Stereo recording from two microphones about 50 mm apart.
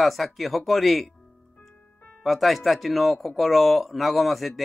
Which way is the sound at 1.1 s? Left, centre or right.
Centre.